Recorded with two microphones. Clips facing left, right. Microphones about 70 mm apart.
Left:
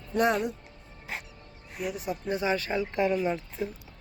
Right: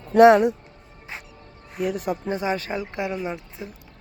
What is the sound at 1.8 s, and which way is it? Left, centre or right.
Speech, right.